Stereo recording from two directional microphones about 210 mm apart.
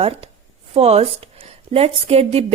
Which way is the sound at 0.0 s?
25° right (ahead or behind).